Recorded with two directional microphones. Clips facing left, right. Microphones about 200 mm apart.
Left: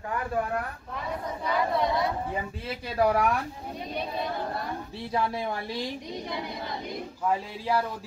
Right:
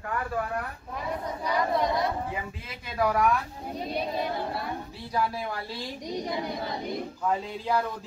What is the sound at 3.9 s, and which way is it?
Speech, 10° right (ahead or behind).